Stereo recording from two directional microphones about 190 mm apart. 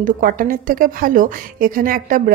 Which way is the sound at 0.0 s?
45° right (ahead or behind).